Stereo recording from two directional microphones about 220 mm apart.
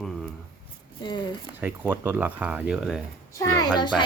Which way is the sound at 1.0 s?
20° left (ahead or behind).